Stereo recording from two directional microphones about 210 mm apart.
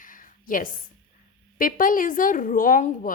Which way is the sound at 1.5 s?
40° left (ahead or behind).